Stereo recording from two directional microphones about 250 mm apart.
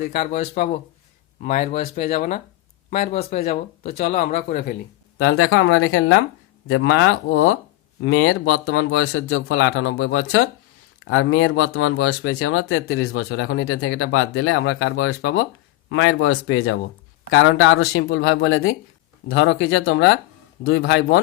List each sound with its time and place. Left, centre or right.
0.0 s speech: left
5.2 s speech: left